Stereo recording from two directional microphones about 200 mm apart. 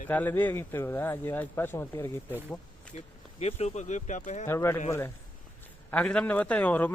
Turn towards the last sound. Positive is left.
turn(degrees=10)  # may be behind; listen again after turning